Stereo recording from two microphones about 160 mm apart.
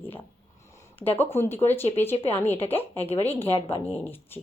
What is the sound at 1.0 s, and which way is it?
Speech, 10° left (ahead or behind).